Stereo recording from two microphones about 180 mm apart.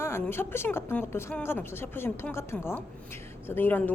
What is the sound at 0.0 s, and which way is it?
A woman's voice, 15° left (ahead or behind).